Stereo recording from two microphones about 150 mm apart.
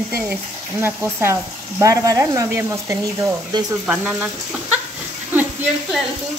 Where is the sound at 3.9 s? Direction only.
5° right (ahead or behind).